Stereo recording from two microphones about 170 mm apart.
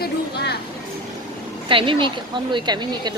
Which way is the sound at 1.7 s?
30° right (ahead or behind).